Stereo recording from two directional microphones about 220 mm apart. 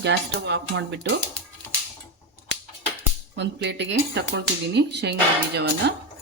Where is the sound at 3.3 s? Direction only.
50° right (ahead or behind).